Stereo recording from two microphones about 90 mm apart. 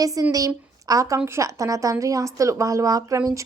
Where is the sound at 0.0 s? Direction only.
40° right (ahead or behind).